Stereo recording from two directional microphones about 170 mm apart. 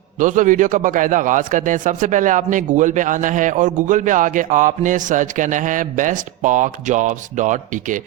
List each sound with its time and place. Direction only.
0.2 s a man's voice: 50° right (ahead or behind)